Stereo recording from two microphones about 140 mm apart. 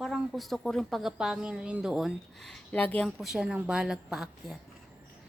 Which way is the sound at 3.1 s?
5° right (ahead or behind).